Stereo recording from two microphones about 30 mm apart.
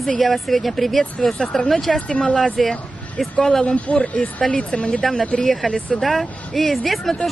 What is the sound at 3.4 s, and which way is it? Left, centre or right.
Speech, centre.